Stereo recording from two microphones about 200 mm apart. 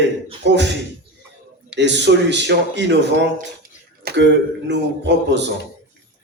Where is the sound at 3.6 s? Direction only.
50° right (ahead or behind).